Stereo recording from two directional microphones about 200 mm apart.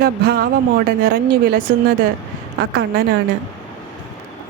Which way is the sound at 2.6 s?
55° right (ahead or behind).